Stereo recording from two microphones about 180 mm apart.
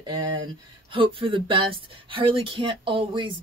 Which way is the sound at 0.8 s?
30° right (ahead or behind).